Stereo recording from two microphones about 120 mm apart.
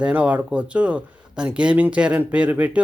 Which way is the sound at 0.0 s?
10° right (ahead or behind).